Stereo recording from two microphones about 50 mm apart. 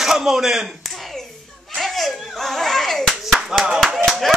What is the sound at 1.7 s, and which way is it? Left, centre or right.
Clapping, centre.